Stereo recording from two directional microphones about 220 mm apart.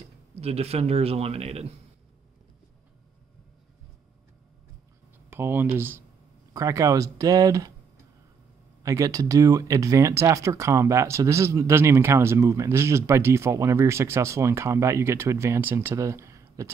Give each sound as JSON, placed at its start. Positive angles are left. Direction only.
{"t": 0.4, "sound": "a man's voice", "side_deg": -30}
{"t": 5.3, "sound": "speech", "side_deg": -10}
{"t": 8.8, "sound": "speech", "side_deg": -15}